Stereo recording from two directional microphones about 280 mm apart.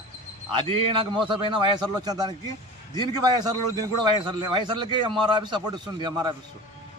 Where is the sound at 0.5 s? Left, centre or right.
Centre.